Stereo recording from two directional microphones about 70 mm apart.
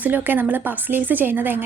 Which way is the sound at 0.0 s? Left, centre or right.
Right.